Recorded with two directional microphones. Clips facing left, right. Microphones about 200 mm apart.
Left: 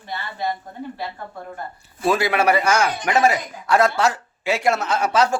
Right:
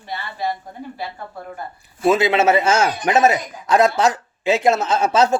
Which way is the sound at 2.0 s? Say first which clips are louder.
Right 3 dB; 20° right (ahead or behind).